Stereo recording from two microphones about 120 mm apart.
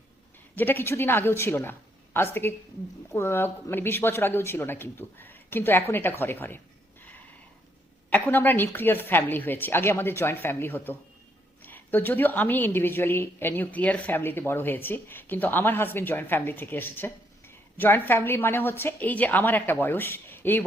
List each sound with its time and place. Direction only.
0.5 s a woman's voice: 15° left (ahead or behind)
8.1 s a woman's voice: 15° left (ahead or behind)